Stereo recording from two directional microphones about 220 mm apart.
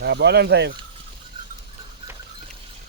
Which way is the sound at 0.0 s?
50° right (ahead or behind).